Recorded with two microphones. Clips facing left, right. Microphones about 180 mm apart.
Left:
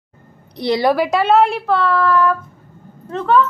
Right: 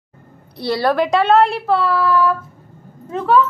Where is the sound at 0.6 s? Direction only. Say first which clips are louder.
Left 2 dB; 15° left (ahead or behind).